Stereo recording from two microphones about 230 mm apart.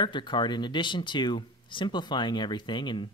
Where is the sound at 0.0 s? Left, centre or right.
Left.